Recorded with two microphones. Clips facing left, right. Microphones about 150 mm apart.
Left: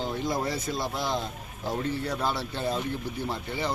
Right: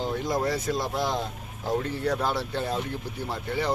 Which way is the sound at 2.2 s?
10° right (ahead or behind).